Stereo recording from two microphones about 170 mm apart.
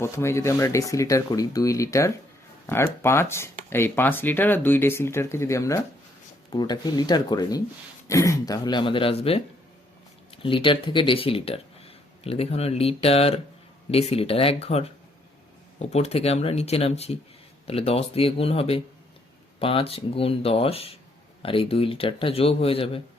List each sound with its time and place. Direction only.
0.0 s a man's voice: 15° left (ahead or behind); by 23.0 s 35° left (ahead or behind)